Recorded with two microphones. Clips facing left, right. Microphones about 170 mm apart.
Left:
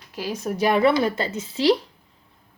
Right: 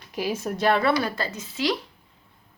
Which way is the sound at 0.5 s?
15° left (ahead or behind).